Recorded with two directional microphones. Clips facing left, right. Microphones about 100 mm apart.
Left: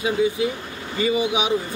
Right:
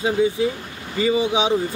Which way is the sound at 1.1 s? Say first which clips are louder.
Right 3 dB; 30° right (ahead or behind).